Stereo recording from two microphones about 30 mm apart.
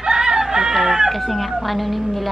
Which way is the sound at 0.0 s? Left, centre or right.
Right.